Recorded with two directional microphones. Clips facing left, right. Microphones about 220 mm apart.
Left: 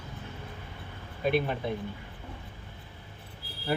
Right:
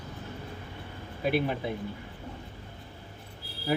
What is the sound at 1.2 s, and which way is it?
Speech, 5° right (ahead or behind).